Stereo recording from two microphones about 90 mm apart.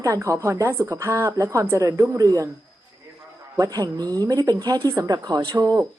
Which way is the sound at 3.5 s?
45° right (ahead or behind).